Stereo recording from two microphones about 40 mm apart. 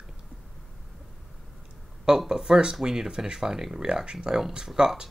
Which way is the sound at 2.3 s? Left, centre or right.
Centre.